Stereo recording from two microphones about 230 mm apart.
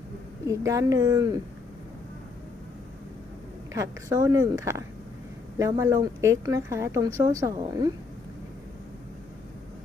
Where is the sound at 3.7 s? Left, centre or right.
Centre.